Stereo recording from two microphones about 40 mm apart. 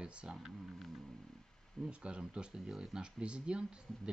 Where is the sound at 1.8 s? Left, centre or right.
Right.